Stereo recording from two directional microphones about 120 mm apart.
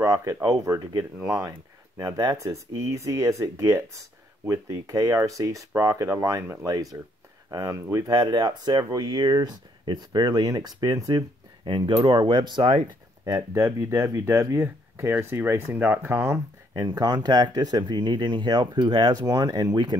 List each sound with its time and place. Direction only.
0.0 s speech: 25° right (ahead or behind)
8.2 s speech: 40° right (ahead or behind)